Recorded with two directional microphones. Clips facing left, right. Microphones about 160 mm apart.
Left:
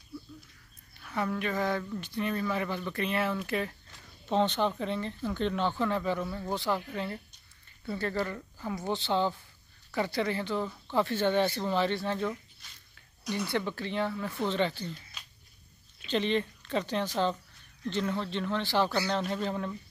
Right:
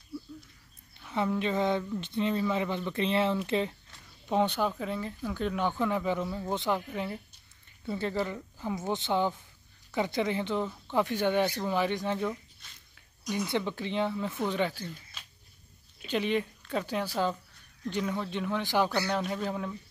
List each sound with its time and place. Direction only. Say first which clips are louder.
1.0 s speech: right 2 dB; 20° right (ahead or behind)
4.3 s speech: even; 10° right (ahead or behind)